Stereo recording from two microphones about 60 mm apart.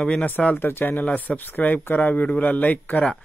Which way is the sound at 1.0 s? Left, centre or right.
Left.